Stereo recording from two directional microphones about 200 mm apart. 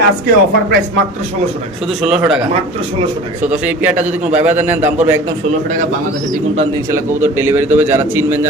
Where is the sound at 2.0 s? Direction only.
5° right (ahead or behind).